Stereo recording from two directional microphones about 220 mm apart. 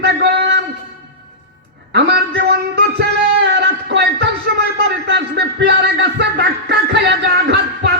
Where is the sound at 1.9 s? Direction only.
50° right (ahead or behind).